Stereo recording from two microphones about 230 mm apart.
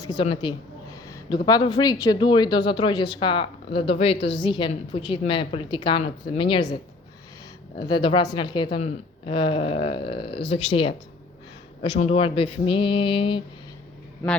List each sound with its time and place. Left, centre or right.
0.0 s speech: centre
4.2 s a woman's voice: left
4.4 s speech: left
7.8 s speech: centre